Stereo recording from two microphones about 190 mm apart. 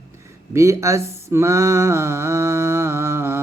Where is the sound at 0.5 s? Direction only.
15° right (ahead or behind).